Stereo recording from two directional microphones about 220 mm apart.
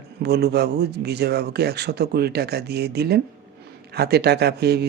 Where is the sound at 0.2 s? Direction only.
50° right (ahead or behind).